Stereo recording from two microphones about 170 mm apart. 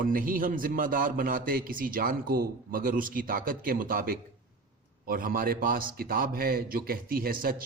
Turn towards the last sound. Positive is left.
turn(degrees=-60)  # may be behind; listen again after turning